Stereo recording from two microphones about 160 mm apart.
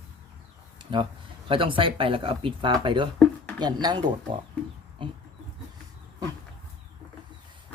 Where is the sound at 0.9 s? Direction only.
30° right (ahead or behind).